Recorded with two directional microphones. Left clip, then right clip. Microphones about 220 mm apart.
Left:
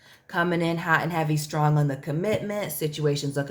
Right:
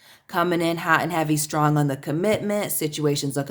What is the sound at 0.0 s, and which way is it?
Speech, 30° right (ahead or behind).